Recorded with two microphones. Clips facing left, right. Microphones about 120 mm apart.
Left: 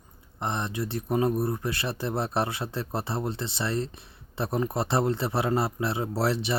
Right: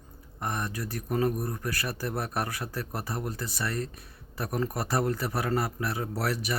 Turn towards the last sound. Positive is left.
turn(degrees=25)  # may be behind; listen again after turning